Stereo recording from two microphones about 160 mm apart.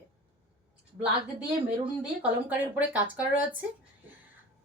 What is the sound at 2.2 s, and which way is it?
A woman's voice, 10° right (ahead or behind).